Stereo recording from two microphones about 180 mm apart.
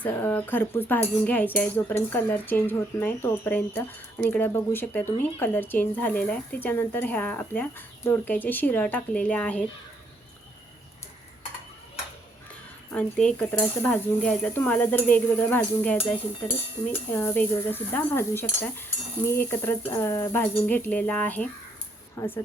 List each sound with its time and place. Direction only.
0.0 s speech: 10° left (ahead or behind)
12.9 s speech: 5° left (ahead or behind)